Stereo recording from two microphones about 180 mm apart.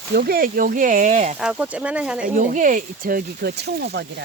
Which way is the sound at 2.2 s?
45° right (ahead or behind).